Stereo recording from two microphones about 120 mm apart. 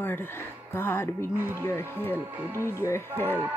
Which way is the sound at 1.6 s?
20° left (ahead or behind).